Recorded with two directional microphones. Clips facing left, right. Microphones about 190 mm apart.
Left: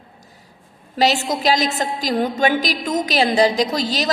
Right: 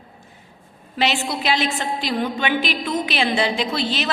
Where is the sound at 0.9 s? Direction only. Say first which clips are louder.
Left 4 dB; 40° left (ahead or behind).